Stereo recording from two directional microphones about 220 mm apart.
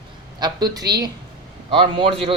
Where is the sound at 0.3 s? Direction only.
20° right (ahead or behind).